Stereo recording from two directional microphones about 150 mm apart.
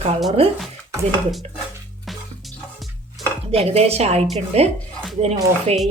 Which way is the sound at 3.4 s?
40° right (ahead or behind).